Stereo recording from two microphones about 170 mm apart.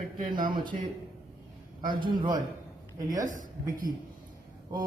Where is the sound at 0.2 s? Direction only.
55° right (ahead or behind).